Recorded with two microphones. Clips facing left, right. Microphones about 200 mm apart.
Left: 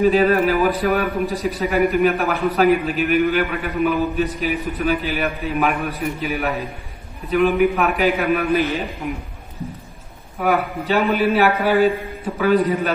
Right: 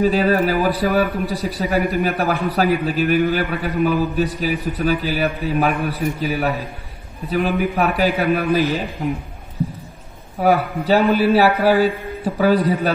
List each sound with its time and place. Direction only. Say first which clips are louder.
0.0 s a man's voice: left 1 dB; 35° right (ahead or behind)
10.4 s a man's voice: right 3 dB; 35° right (ahead or behind)